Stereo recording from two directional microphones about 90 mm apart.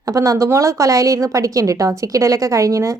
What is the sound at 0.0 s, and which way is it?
A woman's voice, 40° right (ahead or behind).